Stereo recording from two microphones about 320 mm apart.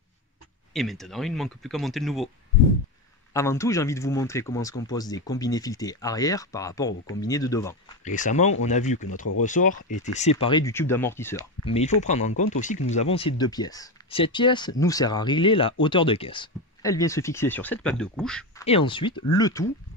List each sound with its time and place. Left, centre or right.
0.7 s speech: centre
3.3 s speech: centre
8.0 s speech: left
10.4 s speech: centre
11.6 s speech: centre
18.7 s speech: centre